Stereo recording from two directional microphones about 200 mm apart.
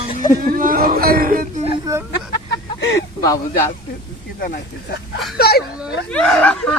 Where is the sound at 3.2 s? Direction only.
15° left (ahead or behind).